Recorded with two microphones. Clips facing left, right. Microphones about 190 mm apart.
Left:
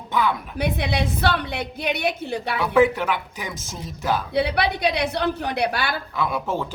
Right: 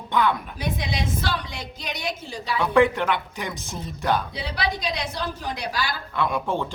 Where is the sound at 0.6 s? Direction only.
60° left (ahead or behind).